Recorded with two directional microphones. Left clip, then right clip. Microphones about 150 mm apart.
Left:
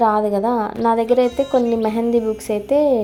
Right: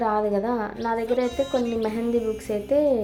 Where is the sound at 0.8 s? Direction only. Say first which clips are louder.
Left 10 dB; 45° left (ahead or behind).